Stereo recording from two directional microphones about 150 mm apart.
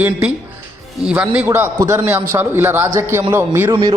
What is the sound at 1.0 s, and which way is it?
A man's voice, 10° right (ahead or behind).